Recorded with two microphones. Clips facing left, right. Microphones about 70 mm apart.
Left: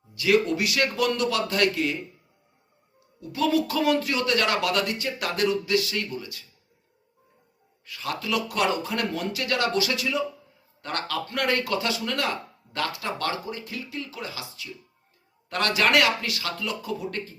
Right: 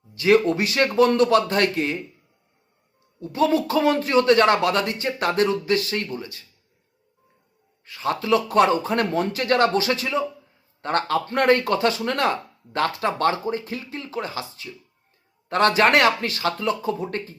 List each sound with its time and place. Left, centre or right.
0.1 s speech: right
3.2 s speech: right
7.9 s speech: right